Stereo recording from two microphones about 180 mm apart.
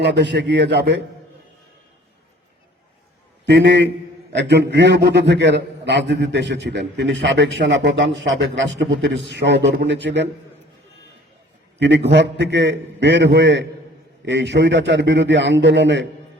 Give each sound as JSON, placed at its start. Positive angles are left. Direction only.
{"t": 0.0, "sound": "a man's voice", "side_deg": -75}
{"t": 3.4, "sound": "a man's voice", "side_deg": -70}
{"t": 11.8, "sound": "a man's voice", "side_deg": -70}